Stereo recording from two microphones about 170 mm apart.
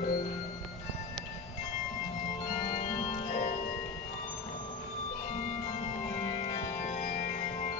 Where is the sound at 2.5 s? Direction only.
40° left (ahead or behind).